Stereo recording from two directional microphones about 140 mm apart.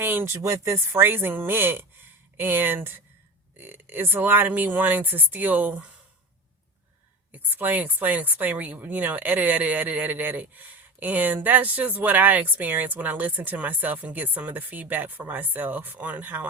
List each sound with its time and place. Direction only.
0.0 s speech: 15° right (ahead or behind)
7.3 s speech: 10° right (ahead or behind)